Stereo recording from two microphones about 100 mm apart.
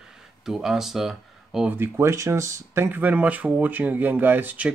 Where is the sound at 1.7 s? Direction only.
25° right (ahead or behind).